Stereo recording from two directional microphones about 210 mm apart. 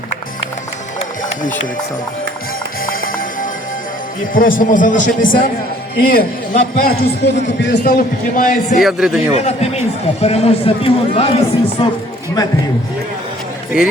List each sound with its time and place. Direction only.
2.8 s music: 45° left (ahead or behind)
4.4 s a man's voice: 40° left (ahead or behind)
8.8 s speech: 5° right (ahead or behind)
9.3 s speech: 30° left (ahead or behind)